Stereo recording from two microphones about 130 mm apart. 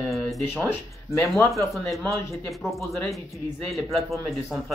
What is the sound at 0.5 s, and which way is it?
Speech, 20° left (ahead or behind).